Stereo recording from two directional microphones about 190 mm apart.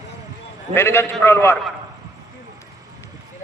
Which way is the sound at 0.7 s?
10° left (ahead or behind).